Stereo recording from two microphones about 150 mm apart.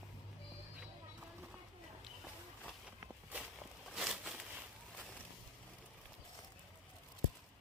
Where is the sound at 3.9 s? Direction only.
5° right (ahead or behind).